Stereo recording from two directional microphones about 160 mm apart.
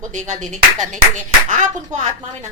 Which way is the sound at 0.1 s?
50° right (ahead or behind).